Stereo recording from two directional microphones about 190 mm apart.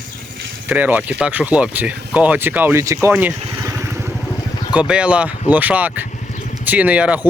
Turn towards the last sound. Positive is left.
turn(degrees=-5)  # may be behind; listen again after turning